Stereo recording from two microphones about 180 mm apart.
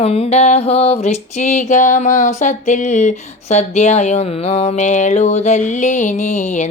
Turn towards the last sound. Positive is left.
turn(degrees=45)  # may be behind; listen again after turning